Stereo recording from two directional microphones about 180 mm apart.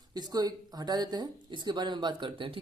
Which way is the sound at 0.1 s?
20° right (ahead or behind).